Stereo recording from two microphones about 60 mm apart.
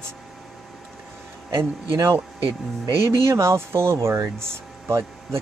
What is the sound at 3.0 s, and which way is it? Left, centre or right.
Speech, right.